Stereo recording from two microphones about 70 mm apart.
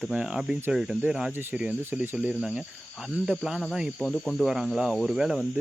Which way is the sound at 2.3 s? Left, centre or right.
Centre.